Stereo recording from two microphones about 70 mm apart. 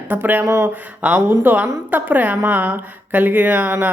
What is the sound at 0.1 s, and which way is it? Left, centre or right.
Speech, right.